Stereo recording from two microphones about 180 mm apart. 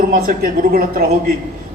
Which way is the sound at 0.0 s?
50° right (ahead or behind).